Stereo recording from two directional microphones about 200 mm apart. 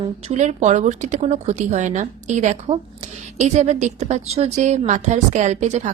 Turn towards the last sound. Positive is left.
turn(degrees=-35)  # may be behind; listen again after turning